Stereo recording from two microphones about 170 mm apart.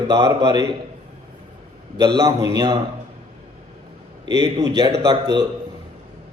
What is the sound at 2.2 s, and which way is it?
Speech, 20° right (ahead or behind).